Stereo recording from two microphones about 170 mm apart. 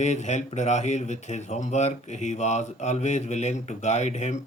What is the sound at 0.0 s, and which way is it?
Speech, 45° left (ahead or behind).